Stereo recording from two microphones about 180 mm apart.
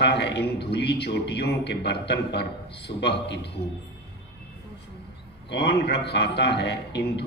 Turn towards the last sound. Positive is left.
turn(degrees=70)  # may be behind; listen again after turning